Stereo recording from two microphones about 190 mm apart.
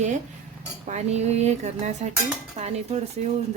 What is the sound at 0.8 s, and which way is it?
Speech, 35° right (ahead or behind).